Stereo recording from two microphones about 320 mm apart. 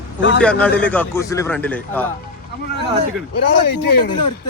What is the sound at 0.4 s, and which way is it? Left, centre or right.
A man's voice, centre.